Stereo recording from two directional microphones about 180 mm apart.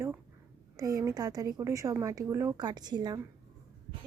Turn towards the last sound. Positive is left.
turn(degrees=-20)  # may be behind; listen again after turning